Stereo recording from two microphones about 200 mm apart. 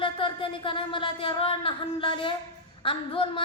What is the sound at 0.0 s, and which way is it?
A woman's voice, 25° left (ahead or behind).